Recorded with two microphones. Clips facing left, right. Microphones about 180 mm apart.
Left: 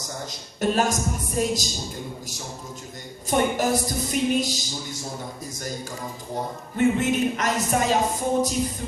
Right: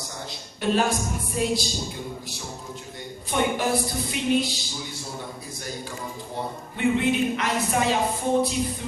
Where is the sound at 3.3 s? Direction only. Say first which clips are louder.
Left 2 dB; 45° left (ahead or behind).